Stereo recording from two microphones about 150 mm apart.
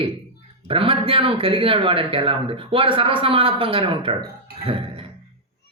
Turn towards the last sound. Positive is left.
turn(degrees=-35)  # may be behind; listen again after turning